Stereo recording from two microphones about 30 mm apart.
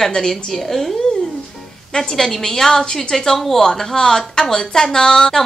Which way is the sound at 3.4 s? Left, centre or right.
Centre.